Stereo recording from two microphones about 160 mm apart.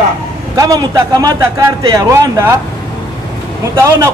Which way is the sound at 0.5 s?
25° right (ahead or behind).